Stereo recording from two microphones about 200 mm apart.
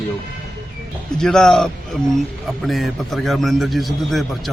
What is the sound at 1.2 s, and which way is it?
A man's voice, 5° left (ahead or behind).